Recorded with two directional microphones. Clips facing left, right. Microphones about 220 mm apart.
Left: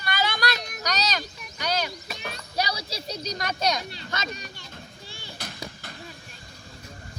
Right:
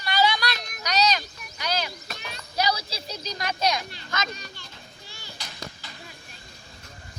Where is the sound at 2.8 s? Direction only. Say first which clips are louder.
Left 3 dB; 40° left (ahead or behind).